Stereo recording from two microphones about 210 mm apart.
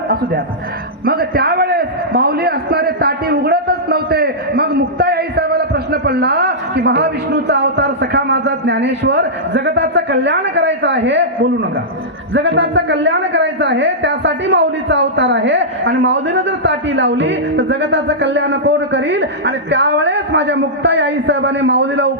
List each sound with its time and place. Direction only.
1.0 s a man's voice: 45° right (ahead or behind)
12.3 s a woman's voice: 55° right (ahead or behind)